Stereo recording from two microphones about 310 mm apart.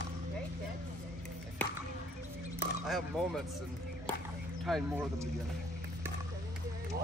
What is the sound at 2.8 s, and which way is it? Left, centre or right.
Speech, centre.